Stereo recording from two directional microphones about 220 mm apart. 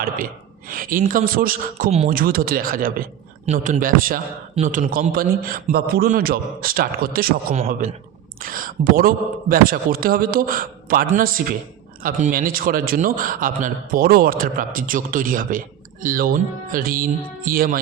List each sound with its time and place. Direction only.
0.7 s a man's voice: 40° right (ahead or behind)